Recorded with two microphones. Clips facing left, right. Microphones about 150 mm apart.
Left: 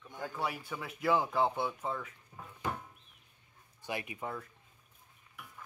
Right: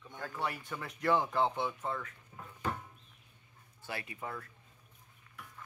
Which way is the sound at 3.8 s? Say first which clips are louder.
Left 3 dB; 15° left (ahead or behind).